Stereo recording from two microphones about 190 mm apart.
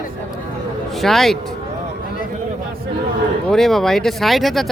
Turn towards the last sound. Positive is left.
turn(degrees=0)  # may be behind; listen again after turning